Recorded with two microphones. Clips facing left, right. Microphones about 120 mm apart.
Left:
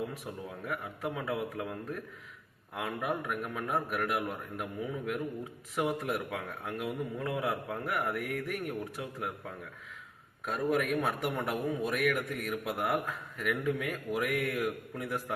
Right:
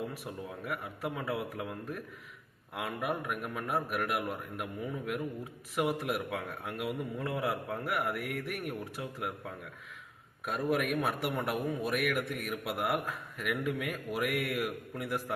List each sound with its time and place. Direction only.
0.6 s a man's voice: 5° right (ahead or behind)
10.4 s a man's voice: 5° right (ahead or behind)